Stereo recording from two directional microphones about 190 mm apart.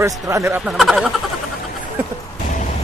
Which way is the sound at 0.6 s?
Centre (ahead or behind).